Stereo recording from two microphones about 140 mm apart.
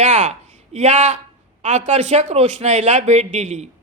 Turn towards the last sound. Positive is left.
turn(degrees=-50)  # may be behind; listen again after turning